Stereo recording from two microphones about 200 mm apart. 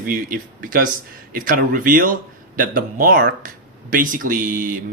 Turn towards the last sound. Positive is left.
turn(degrees=-40)  # may be behind; listen again after turning